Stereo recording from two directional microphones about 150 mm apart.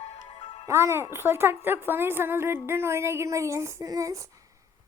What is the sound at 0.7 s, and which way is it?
Speech, 20° right (ahead or behind).